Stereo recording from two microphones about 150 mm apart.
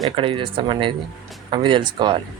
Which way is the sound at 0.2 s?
35° right (ahead or behind).